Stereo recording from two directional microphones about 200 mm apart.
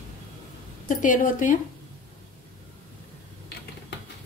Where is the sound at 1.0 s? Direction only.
40° left (ahead or behind).